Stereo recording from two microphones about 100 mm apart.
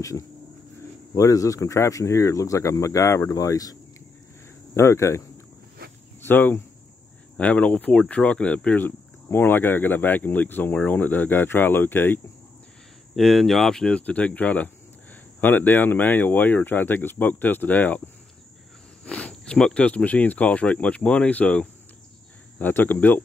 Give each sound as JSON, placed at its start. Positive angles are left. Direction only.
{"t": 1.1, "sound": "speech", "side_deg": 35}
{"t": 4.7, "sound": "speech", "side_deg": 25}
{"t": 6.2, "sound": "speech", "side_deg": 20}
{"t": 13.1, "sound": "speech", "side_deg": 0}
{"t": 19.0, "sound": "speech", "side_deg": 10}